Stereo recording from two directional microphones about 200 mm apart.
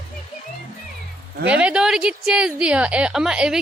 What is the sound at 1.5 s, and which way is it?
A woman's voice, 5° right (ahead or behind).